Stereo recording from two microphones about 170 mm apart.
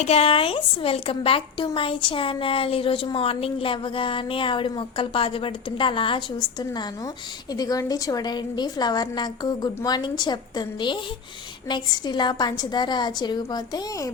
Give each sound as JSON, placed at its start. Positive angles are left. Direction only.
{"t": 0.0, "sound": "a woman's voice", "side_deg": 35}